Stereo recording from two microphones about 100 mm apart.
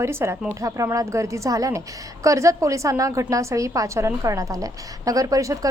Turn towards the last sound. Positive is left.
turn(degrees=-35)  # may be behind; listen again after turning